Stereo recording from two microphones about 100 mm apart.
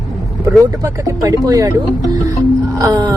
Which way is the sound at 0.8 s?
35° right (ahead or behind).